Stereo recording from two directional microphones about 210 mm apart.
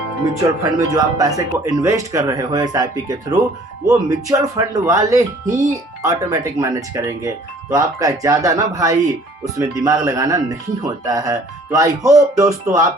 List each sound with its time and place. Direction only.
0.6 s speech: 15° right (ahead or behind)